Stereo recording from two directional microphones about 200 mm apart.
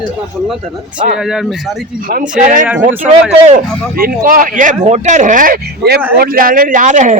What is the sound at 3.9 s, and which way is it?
Speech, 45° right (ahead or behind).